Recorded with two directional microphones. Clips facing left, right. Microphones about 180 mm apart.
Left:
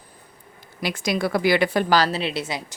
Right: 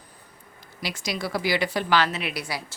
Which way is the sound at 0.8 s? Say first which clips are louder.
Left 7 dB; 55° left (ahead or behind).